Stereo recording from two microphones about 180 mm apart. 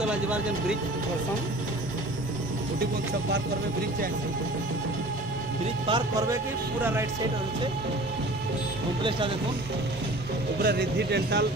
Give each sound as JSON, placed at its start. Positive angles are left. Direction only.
{"t": 0.0, "sound": "speech", "side_deg": -5}
{"t": 5.9, "sound": "a man's voice", "side_deg": -20}
{"t": 10.6, "sound": "speech", "side_deg": -65}